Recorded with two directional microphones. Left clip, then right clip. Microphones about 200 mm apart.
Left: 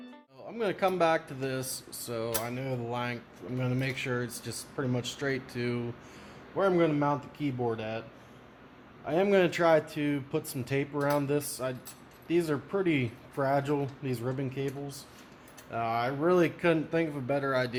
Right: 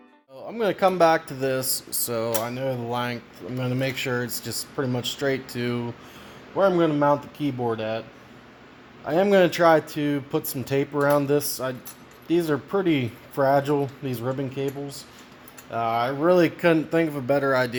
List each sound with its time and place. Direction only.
0.4 s speech: 40° right (ahead or behind)
9.0 s speech: 35° right (ahead or behind)